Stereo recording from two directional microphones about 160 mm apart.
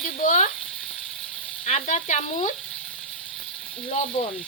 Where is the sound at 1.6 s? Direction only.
45° left (ahead or behind).